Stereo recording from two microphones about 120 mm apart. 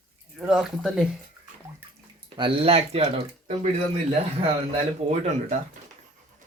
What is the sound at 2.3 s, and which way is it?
Speech, 45° right (ahead or behind).